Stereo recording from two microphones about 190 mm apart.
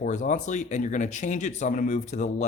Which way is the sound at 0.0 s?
40° left (ahead or behind).